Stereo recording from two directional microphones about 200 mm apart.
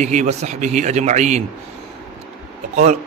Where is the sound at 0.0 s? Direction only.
35° right (ahead or behind).